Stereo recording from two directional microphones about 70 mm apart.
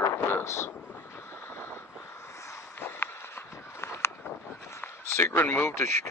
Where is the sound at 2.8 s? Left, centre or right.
Left.